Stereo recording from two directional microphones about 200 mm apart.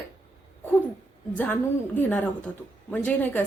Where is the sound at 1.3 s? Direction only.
10° left (ahead or behind).